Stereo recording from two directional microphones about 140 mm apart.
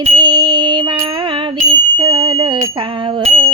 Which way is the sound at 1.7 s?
35° right (ahead or behind).